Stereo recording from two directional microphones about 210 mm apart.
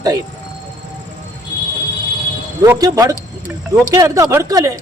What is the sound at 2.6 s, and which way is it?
Speech, 15° right (ahead or behind).